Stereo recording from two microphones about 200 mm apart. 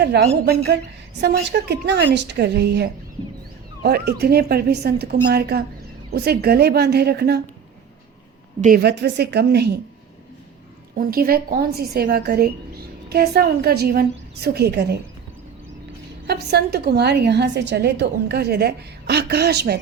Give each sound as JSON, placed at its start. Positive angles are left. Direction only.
{"t": 0.0, "sound": "a woman's voice", "side_deg": -55}
{"t": 8.6, "sound": "a woman's voice", "side_deg": -50}
{"t": 10.9, "sound": "a woman's voice", "side_deg": -50}
{"t": 16.2, "sound": "a woman's voice", "side_deg": -55}